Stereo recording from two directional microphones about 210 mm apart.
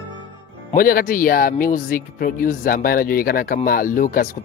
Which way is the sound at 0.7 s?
45° left (ahead or behind).